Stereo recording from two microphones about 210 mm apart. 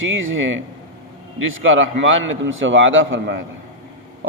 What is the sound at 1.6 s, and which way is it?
A man's voice, 65° right (ahead or behind).